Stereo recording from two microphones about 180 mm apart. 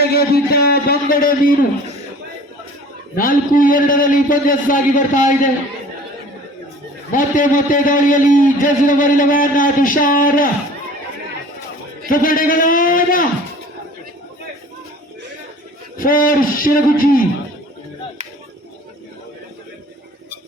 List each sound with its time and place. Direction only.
0.0 s a man's voice: 60° left (ahead or behind)
3.2 s a man's voice: 50° left (ahead or behind)
7.1 s a man's voice: 50° left (ahead or behind)
12.0 s a man's voice: 50° left (ahead or behind)
16.0 s a man's voice: 50° left (ahead or behind)